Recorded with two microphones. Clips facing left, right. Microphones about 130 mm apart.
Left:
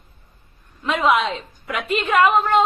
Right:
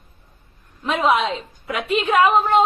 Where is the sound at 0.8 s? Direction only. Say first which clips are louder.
Even; 5° right (ahead or behind).